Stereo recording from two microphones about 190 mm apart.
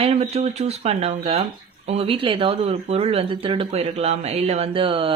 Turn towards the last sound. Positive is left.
turn(degrees=-25)  # may be behind; listen again after turning